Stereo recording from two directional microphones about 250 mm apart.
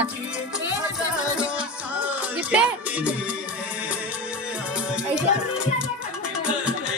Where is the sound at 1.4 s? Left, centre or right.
Centre.